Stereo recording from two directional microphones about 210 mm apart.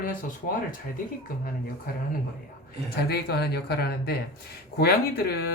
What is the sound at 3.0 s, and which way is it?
Speech, 50° left (ahead or behind).